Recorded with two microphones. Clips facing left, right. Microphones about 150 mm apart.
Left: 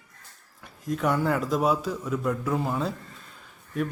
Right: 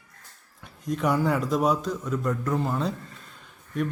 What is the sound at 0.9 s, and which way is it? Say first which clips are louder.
A man's voice: right 1 dB; centre (ahead or behind).